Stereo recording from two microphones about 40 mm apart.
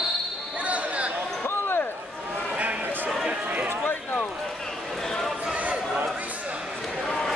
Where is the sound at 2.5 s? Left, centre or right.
Right.